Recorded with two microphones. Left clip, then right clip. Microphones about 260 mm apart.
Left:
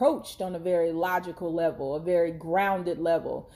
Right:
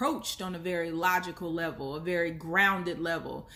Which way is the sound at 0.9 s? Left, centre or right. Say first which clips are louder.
Even; right.